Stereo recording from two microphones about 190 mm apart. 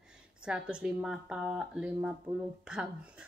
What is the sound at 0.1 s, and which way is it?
A woman's voice, 5° right (ahead or behind).